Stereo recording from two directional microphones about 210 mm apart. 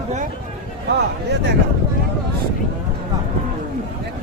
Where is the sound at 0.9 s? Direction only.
55° right (ahead or behind).